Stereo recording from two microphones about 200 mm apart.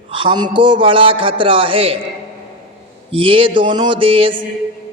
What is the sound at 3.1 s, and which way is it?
A woman's voice, 25° right (ahead or behind).